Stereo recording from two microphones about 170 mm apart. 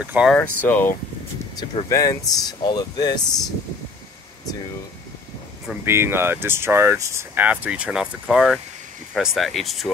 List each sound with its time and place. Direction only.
0.0 s speech: 10° right (ahead or behind)
0.3 s speech: 10° left (ahead or behind)
5.9 s speech: 15° right (ahead or behind)